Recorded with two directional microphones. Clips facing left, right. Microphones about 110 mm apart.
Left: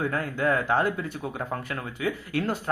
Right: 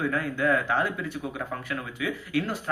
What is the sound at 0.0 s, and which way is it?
Speech, 40° left (ahead or behind).